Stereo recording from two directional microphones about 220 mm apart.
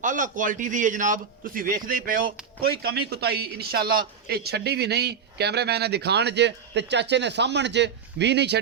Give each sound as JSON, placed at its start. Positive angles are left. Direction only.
{"t": 0.0, "sound": "a man's voice", "side_deg": -35}